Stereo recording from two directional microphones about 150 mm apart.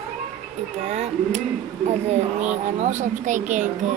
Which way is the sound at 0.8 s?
50° right (ahead or behind).